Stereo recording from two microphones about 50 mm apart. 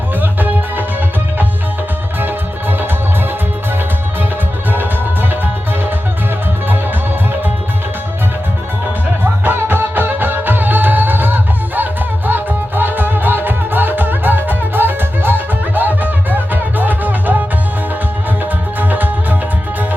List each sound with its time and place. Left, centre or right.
0.2 s music: right
9.2 s music: right
18.8 s music: right